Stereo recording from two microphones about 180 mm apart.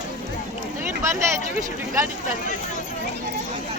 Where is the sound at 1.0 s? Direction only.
15° right (ahead or behind).